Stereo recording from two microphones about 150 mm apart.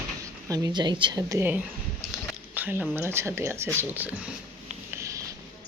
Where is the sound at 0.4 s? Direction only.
25° right (ahead or behind).